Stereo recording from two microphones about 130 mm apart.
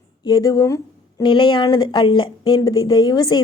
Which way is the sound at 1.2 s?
40° left (ahead or behind).